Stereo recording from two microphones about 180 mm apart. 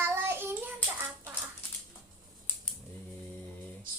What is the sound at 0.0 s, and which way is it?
Child singing, 15° right (ahead or behind).